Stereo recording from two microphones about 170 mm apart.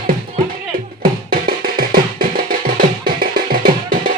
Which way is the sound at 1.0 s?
55° right (ahead or behind).